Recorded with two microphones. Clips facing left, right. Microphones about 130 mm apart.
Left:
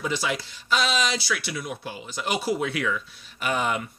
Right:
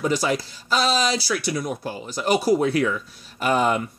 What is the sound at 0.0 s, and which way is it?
Speech, 40° right (ahead or behind).